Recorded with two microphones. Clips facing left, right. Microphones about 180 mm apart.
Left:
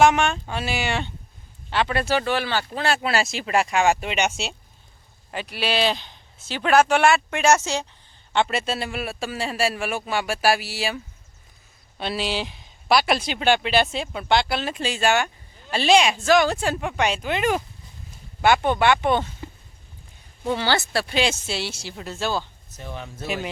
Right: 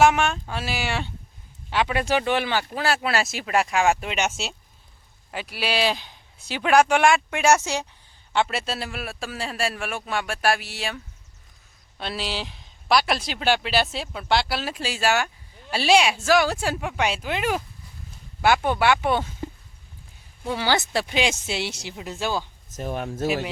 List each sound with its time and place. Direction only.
0.0 s speech: 5° right (ahead or behind)
20.4 s a woman's voice: centre (ahead or behind)
20.7 s speech: 20° right (ahead or behind)
22.7 s speech: 45° right (ahead or behind)